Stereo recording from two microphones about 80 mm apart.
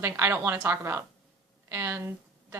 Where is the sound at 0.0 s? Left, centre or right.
Right.